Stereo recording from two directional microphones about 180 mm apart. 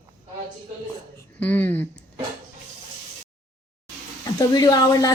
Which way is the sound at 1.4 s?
10° left (ahead or behind).